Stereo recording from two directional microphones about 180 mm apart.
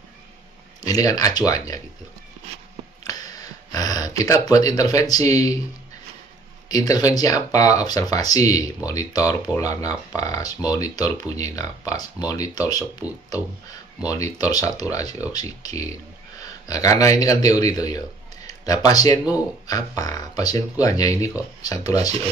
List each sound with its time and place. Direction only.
0.8 s speech: 20° left (ahead or behind)
3.0 s a sound: 20° left (ahead or behind)
6.7 s speech: 20° left (ahead or behind)